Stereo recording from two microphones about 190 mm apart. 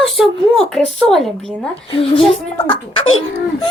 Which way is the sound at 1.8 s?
25° left (ahead or behind).